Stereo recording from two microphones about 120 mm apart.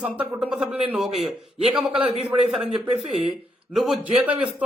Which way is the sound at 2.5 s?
5° right (ahead or behind).